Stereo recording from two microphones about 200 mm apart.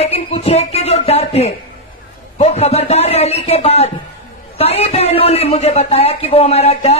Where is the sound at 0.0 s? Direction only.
30° left (ahead or behind).